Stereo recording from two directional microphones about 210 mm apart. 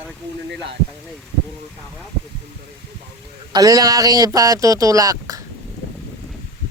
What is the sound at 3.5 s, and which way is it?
Speech, 15° right (ahead or behind).